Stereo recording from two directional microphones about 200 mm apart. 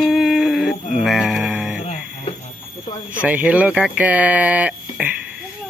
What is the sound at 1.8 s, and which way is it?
Radio, 35° left (ahead or behind).